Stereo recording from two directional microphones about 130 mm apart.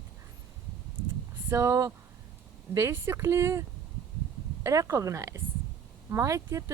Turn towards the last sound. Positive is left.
turn(degrees=-25)  # may be behind; listen again after turning